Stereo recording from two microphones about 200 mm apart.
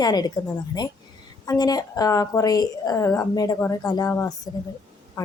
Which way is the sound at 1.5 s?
20° left (ahead or behind).